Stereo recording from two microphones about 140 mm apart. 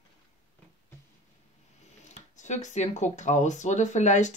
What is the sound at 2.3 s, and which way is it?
Speech, 60° left (ahead or behind).